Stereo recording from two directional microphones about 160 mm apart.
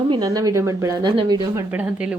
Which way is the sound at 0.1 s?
25° right (ahead or behind).